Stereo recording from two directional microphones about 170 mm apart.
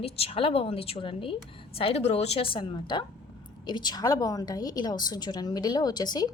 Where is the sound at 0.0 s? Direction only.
35° left (ahead or behind).